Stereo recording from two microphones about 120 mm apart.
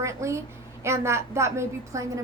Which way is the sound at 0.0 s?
25° right (ahead or behind).